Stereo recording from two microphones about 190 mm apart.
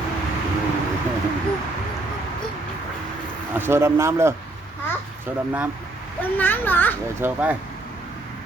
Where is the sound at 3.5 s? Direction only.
10° right (ahead or behind).